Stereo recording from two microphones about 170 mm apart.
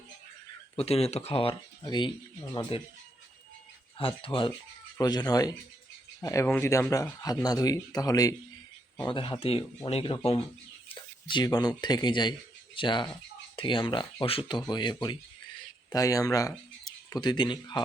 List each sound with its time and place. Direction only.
0.8 s speech: 35° left (ahead or behind)
3.9 s speech: 30° left (ahead or behind)
10.8 s a sound: 30° left (ahead or behind)
11.8 s speech: 25° left (ahead or behind)